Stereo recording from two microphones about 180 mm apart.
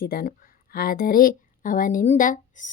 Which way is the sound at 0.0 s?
55° left (ahead or behind).